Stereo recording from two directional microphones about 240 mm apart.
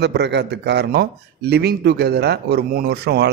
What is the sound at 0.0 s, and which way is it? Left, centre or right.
A man's voice, right.